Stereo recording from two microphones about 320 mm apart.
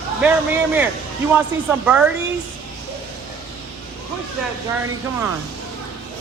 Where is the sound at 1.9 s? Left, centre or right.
Centre.